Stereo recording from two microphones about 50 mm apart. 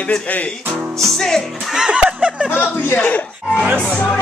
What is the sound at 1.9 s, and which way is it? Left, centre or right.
Speech, right.